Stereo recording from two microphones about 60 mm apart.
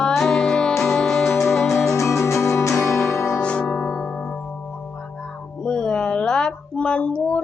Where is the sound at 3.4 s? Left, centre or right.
Centre.